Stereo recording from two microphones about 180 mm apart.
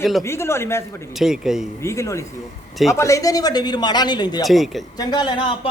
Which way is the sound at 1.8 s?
15° left (ahead or behind).